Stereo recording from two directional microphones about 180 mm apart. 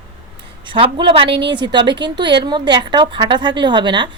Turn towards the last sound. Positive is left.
turn(degrees=-25)  # may be behind; listen again after turning